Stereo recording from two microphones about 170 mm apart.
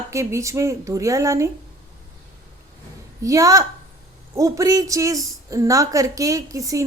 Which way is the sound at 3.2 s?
20° right (ahead or behind).